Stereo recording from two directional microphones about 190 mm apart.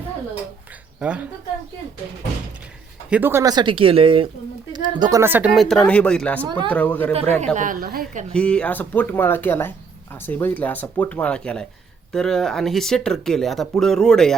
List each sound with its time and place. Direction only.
0.9 s speech: 5° right (ahead or behind)
3.1 s speech: 10° right (ahead or behind); by 7.5 s 5° left (ahead or behind)
7.5 s a woman's voice: 45° right (ahead or behind)
8.3 s speech: 5° left (ahead or behind)